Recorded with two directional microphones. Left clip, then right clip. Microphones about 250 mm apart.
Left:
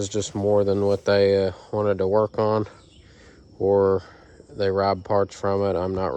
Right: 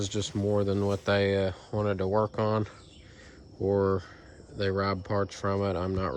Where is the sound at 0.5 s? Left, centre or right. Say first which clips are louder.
Left 8 dB; left.